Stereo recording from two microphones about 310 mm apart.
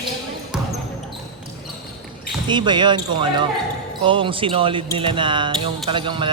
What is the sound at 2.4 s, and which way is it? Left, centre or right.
A man's voice, centre.